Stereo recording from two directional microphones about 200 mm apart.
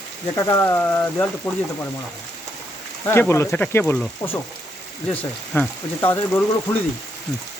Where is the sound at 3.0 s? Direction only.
10° left (ahead or behind).